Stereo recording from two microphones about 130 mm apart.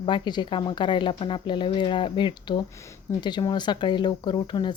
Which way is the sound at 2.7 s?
20° left (ahead or behind).